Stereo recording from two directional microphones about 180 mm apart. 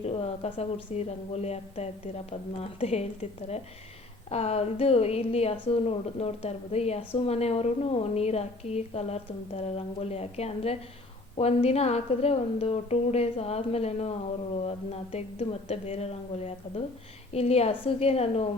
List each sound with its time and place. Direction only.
0.0 s a woman's voice: 35° left (ahead or behind)